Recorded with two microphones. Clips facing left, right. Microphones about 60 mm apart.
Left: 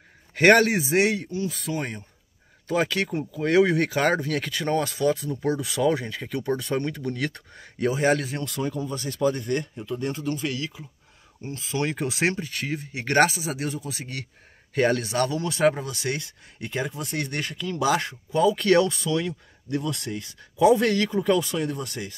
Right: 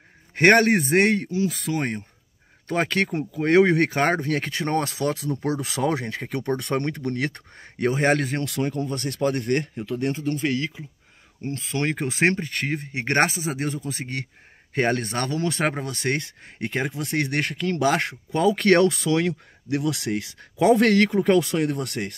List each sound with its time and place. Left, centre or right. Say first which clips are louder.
0.4 s speech: right 1 dB; right
0.7 s speech: right 3 dB; right
1.3 s speech: right 4 dB; right
4.9 s speech: left 1 dB; right
7.2 s speech: right 2 dB; right
10.2 s speech: right 4 dB; right
11.4 s speech: right 2 dB; right